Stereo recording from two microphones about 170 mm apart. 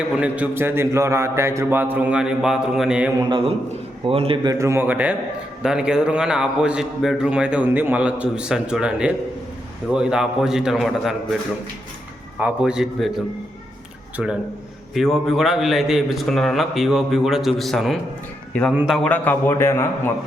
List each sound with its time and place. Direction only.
0.1 s a man's voice: 5° right (ahead or behind)
3.2 s a man's voice: 25° right (ahead or behind)
4.4 s a man's voice: 15° right (ahead or behind); by 11.3 s centre (ahead or behind)
12.4 s a man's voice: 5° right (ahead or behind)
14.9 s a man's voice: centre (ahead or behind)